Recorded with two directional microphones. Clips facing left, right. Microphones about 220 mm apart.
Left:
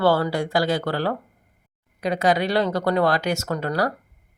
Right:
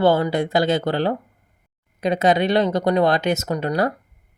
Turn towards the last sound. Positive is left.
turn(degrees=-20)  # may be behind; listen again after turning